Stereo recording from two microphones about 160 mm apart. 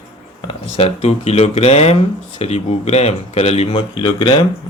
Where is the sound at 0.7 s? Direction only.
45° left (ahead or behind).